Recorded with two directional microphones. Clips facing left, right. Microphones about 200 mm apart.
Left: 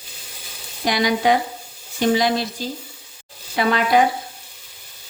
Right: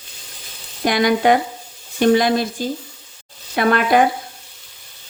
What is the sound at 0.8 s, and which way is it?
A woman's voice, 55° right (ahead or behind).